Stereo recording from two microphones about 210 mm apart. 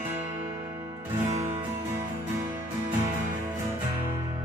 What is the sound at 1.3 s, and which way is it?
Music, 30° right (ahead or behind).